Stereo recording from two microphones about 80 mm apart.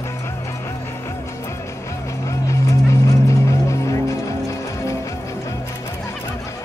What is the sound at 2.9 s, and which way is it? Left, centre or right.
Music, left.